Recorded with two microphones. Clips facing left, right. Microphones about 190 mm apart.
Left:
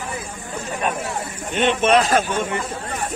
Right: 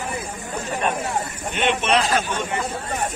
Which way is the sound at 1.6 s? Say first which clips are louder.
Left 4 dB; 45° left (ahead or behind).